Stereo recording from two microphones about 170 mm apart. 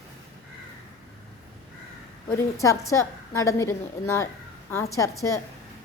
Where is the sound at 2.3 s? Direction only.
20° left (ahead or behind).